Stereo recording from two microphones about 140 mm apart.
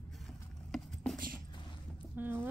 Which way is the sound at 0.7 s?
Centre (ahead or behind).